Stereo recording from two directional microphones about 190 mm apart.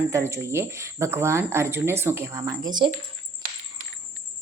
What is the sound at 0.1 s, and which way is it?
Speech, 15° right (ahead or behind).